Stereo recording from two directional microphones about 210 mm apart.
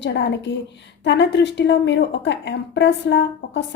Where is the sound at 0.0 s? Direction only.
55° left (ahead or behind).